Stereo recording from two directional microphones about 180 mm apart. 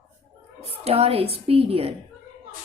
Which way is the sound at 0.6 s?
35° right (ahead or behind).